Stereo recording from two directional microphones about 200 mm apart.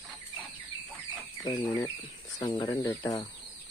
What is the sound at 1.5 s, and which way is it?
Speech, 25° left (ahead or behind).